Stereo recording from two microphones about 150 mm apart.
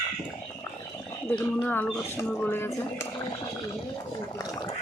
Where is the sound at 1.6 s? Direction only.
10° left (ahead or behind).